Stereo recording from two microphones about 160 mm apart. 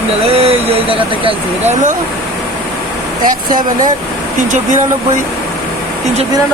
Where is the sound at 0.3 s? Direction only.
40° right (ahead or behind).